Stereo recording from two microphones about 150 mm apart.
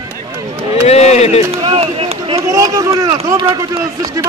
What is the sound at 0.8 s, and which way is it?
Speech, 45° left (ahead or behind).